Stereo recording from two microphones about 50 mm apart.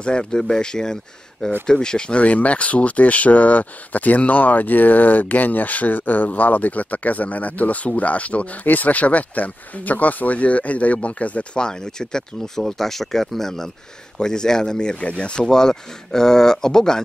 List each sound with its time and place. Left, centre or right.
0.0 s speech: centre
11.5 s speech: centre
15.4 s speech: centre